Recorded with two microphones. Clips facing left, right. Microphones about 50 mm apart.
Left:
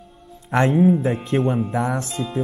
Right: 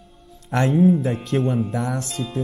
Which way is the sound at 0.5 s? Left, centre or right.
Left.